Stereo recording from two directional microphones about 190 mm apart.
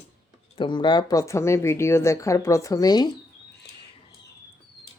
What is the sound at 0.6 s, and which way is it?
Speech, 25° left (ahead or behind).